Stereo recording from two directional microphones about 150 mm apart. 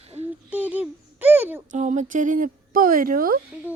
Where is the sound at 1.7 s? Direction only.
55° right (ahead or behind); by 3.4 s 70° right (ahead or behind).